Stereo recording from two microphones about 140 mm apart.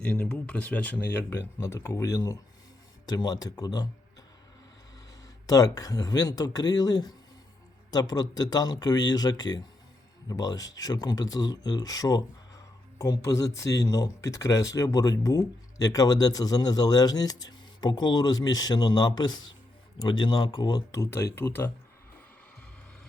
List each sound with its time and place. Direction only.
0.0 s speech: 10° left (ahead or behind); by 3.8 s 30° left (ahead or behind)
5.5 s speech: 25° left (ahead or behind)